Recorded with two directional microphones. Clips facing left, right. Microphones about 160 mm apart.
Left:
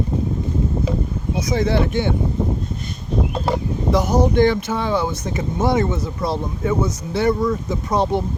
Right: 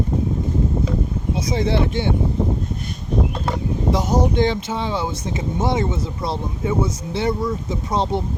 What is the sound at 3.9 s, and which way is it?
Speech, 25° right (ahead or behind).